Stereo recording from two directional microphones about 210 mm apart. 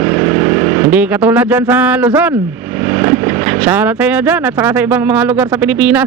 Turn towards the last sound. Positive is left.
turn(degrees=-5)  # may be behind; listen again after turning